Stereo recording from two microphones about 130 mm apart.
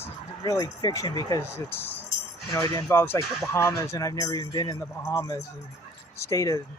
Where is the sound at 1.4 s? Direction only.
20° left (ahead or behind).